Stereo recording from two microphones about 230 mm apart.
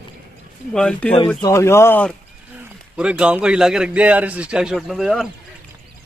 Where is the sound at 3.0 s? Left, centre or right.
Centre.